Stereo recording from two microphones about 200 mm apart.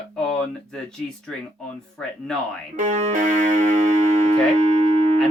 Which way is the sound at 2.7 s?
40° right (ahead or behind).